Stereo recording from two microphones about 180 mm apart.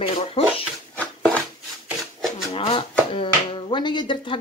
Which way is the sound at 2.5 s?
30° left (ahead or behind).